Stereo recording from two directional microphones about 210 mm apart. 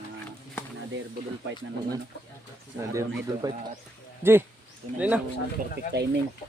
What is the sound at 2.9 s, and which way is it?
Speech, 15° right (ahead or behind).